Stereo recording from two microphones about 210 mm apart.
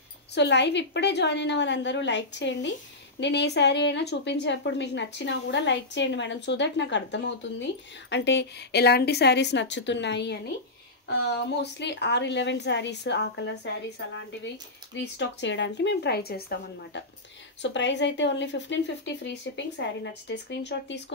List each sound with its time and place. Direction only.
0.3 s a woman's voice: 55° left (ahead or behind)